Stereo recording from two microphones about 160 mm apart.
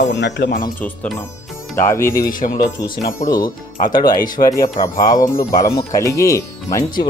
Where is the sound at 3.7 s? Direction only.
55° left (ahead or behind).